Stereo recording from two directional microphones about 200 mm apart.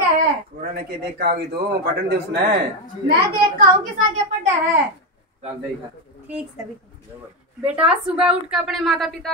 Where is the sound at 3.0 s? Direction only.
50° right (ahead or behind).